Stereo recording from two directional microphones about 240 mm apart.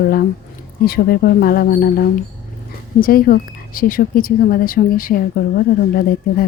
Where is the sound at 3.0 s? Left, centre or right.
Left.